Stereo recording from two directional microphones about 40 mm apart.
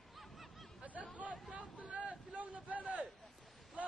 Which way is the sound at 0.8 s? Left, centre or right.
Right.